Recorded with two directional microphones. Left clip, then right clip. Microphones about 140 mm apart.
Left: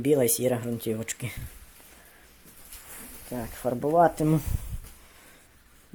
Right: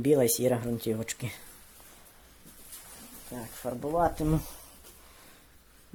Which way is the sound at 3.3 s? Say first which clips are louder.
Left 6 dB; 30° left (ahead or behind).